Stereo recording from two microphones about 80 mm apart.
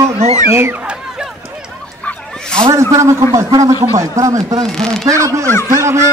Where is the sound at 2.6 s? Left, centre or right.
Right.